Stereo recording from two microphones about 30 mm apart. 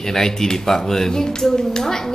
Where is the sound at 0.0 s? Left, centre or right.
Centre.